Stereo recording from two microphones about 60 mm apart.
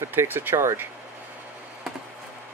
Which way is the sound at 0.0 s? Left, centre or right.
Right.